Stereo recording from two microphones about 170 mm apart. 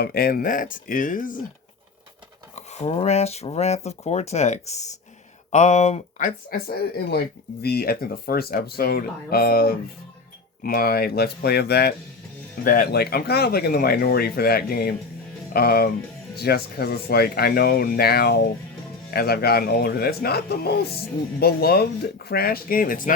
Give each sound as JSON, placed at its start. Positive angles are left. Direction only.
{"t": 0.0, "sound": "speech", "side_deg": 65}
{"t": 2.6, "sound": "speech", "side_deg": 40}